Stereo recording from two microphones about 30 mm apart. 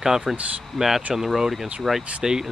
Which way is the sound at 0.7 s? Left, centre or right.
Centre.